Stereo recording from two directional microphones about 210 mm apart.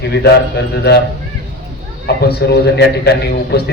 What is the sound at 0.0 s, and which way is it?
Speech, 50° left (ahead or behind).